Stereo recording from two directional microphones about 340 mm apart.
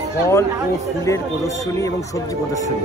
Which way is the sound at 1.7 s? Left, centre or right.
Centre.